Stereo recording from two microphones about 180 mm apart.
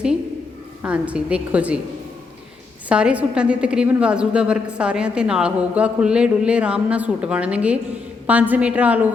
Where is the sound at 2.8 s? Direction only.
5° right (ahead or behind).